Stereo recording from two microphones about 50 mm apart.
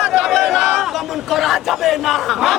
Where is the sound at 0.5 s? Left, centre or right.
Centre.